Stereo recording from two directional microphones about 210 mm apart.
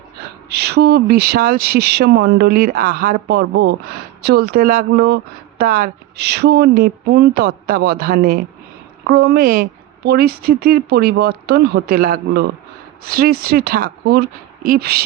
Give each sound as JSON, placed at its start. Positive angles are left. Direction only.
{"t": 0.5, "sound": "speech", "side_deg": -50}